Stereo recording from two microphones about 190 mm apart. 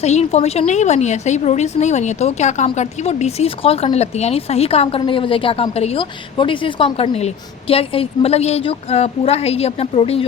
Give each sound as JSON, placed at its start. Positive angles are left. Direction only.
{"t": 0.0, "sound": "a woman's voice", "side_deg": 35}